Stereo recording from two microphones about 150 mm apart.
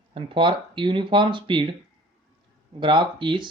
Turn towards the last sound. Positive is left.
turn(degrees=-30)  # may be behind; listen again after turning